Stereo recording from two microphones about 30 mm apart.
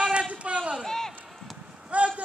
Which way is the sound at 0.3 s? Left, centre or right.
Right.